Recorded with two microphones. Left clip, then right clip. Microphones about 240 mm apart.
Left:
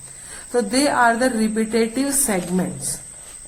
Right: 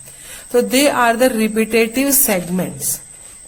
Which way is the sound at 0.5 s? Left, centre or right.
Right.